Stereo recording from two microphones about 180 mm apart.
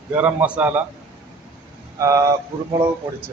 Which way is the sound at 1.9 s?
15° right (ahead or behind).